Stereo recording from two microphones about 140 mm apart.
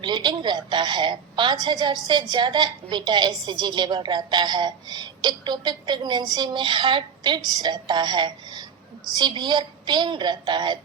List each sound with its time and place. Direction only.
0.0 s a woman's voice: 35° right (ahead or behind)